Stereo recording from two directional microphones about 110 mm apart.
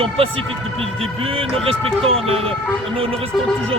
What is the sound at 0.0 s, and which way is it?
Speech, 60° right (ahead or behind).